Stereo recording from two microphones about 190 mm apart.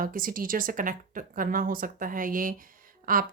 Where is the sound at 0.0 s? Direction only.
50° right (ahead or behind).